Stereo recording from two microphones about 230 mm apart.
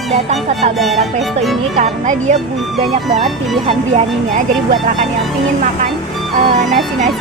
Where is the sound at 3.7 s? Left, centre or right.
Right.